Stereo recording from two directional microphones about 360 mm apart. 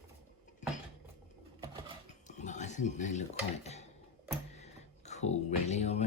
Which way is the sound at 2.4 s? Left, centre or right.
Centre.